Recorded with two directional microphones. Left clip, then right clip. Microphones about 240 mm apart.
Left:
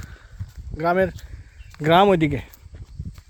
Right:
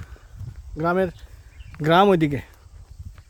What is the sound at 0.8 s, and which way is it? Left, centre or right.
Speech, centre.